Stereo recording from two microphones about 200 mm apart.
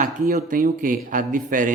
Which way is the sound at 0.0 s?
45° right (ahead or behind).